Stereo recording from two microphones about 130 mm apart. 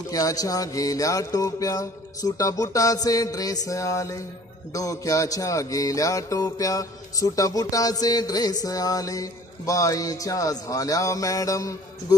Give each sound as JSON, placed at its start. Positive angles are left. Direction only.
{"t": 0.1, "sound": "music", "side_deg": 30}